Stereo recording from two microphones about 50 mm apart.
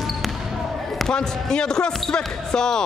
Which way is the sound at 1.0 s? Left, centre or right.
Centre.